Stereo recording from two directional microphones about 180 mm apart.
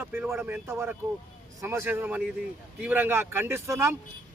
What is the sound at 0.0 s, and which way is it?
Speech, 10° right (ahead or behind).